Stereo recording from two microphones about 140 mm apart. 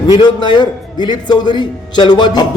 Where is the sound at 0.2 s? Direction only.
30° left (ahead or behind).